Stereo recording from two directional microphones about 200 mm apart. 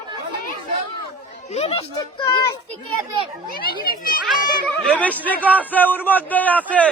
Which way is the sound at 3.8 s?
45° left (ahead or behind).